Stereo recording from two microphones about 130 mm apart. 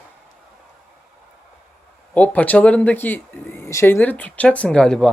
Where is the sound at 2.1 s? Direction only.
10° left (ahead or behind).